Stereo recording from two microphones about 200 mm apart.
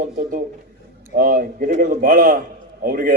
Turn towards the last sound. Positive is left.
turn(degrees=-45)  # may be behind; listen again after turning